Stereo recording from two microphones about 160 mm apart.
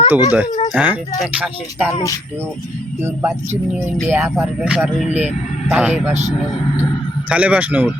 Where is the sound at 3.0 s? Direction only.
15° right (ahead or behind).